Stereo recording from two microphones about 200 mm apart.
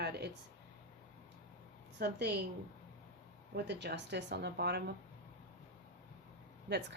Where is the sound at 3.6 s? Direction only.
60° right (ahead or behind).